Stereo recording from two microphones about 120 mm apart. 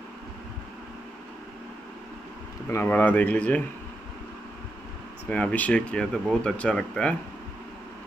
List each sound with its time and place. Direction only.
2.7 s speech: 15° left (ahead or behind)
5.3 s speech: 10° left (ahead or behind)